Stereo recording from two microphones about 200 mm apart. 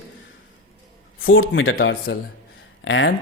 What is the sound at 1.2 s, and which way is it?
A man's voice, 80° left.